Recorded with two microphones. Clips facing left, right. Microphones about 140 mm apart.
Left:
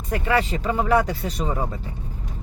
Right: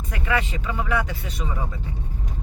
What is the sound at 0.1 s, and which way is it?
Speech, 35° left (ahead or behind).